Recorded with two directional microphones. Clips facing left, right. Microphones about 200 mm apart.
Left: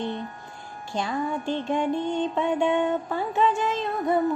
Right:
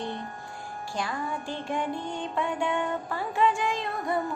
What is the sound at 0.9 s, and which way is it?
Music, 25° left (ahead or behind).